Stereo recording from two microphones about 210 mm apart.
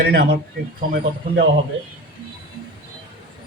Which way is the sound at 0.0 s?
45° right (ahead or behind).